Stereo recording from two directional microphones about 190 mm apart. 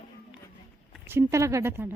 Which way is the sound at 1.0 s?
15° right (ahead or behind).